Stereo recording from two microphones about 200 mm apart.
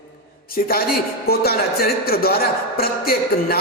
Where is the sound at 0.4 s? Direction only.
45° left (ahead or behind).